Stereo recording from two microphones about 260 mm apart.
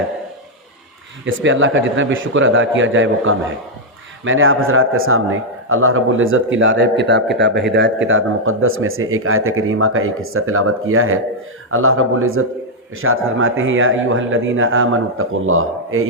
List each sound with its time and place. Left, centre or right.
1.2 s a man's voice: right